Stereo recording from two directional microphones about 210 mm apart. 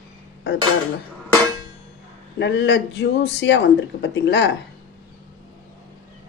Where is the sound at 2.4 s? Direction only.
55° left (ahead or behind).